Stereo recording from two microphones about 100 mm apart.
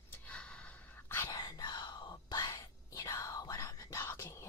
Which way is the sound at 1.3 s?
40° left (ahead or behind).